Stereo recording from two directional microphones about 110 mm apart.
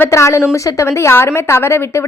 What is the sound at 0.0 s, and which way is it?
A woman's voice, 25° left (ahead or behind).